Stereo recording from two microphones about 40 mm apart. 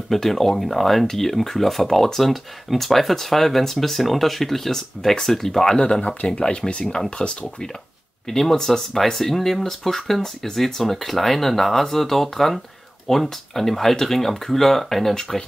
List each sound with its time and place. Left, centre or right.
0.1 s speech: centre; by 7.3 s left
8.3 s speech: centre